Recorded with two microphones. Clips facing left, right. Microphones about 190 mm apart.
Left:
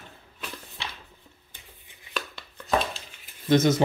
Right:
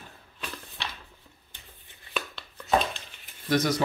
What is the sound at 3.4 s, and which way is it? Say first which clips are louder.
Speech: left 5 dB; 25° left (ahead or behind).